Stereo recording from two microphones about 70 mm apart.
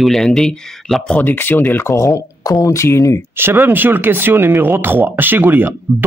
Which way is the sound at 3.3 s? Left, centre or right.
Right.